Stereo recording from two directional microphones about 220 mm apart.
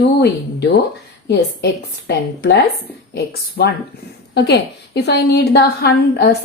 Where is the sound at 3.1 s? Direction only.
45° left (ahead or behind).